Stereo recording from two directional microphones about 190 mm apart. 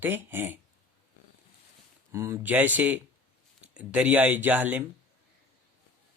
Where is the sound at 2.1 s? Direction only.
15° right (ahead or behind).